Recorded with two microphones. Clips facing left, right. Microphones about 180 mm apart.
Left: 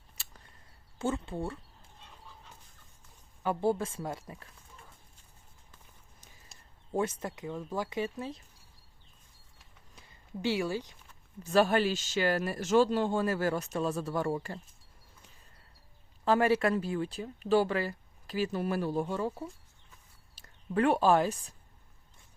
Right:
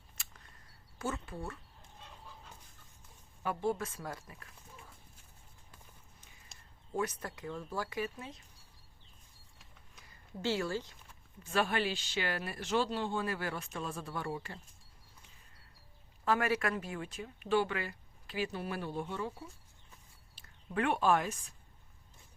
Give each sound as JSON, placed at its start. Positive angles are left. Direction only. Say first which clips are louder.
{"t": 0.9, "sound": "speech", "louder": "left 6 dB", "side_deg": 30}
{"t": 3.4, "sound": "speech", "louder": "left 5 dB", "side_deg": 30}
{"t": 6.5, "sound": "a sound", "louder": "left 1 dB", "side_deg": 0}
{"t": 6.9, "sound": "speech", "louder": "left 4 dB", "side_deg": 25}
{"t": 10.4, "sound": "speech", "louder": "left 3 dB", "side_deg": 15}
{"t": 11.4, "sound": "speech", "louder": "left 7 dB", "side_deg": 40}
{"t": 16.2, "sound": "speech", "louder": "left 6 dB", "side_deg": 30}